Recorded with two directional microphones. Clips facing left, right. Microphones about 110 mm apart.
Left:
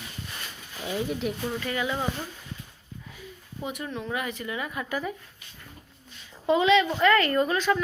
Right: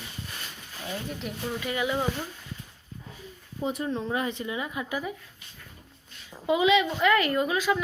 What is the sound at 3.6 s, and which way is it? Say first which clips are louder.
Speech: right 4 dB; 30° right (ahead or behind).